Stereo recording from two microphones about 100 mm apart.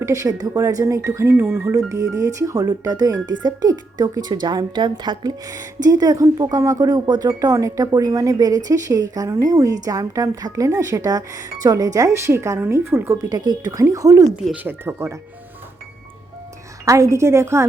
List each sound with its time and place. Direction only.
0.0 s speech: 30° right (ahead or behind)
13.3 s speech: 40° right (ahead or behind)
14.5 s speech: 20° right (ahead or behind)
16.8 s speech: 30° right (ahead or behind)